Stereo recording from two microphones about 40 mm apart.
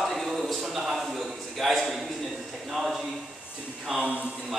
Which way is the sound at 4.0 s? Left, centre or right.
Right.